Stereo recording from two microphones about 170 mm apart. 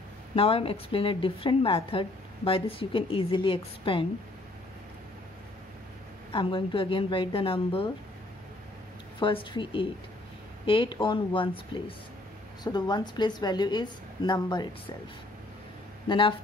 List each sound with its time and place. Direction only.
0.4 s a woman's voice: 35° left (ahead or behind)
6.3 s a woman's voice: 30° left (ahead or behind)
9.2 s a woman's voice: 30° left (ahead or behind)
16.1 s a woman's voice: 30° left (ahead or behind)